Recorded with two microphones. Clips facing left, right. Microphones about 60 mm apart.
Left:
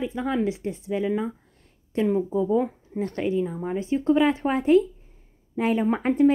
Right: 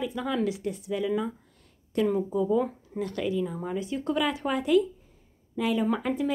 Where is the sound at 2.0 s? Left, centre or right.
Centre.